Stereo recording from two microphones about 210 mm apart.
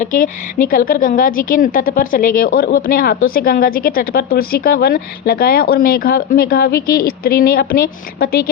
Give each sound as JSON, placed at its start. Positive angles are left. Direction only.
{"t": 0.0, "sound": "a woman's voice", "side_deg": 45}